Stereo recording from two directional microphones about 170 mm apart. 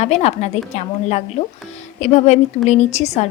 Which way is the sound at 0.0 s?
40° left (ahead or behind).